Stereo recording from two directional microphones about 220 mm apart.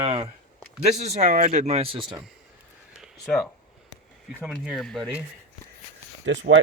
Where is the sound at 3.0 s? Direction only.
Centre (ahead or behind).